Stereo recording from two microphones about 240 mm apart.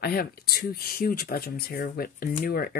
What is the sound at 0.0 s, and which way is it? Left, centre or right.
Speech, left.